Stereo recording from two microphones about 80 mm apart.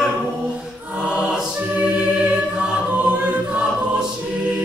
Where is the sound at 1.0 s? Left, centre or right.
Centre.